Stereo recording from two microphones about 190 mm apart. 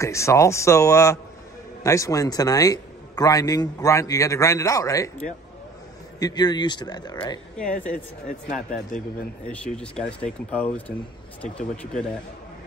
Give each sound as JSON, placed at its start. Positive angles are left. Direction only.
{"t": 0.0, "sound": "a man's voice", "side_deg": 15}
{"t": 6.1, "sound": "speech", "side_deg": 20}
{"t": 8.5, "sound": "speech", "side_deg": 0}
{"t": 11.8, "sound": "speech", "side_deg": 5}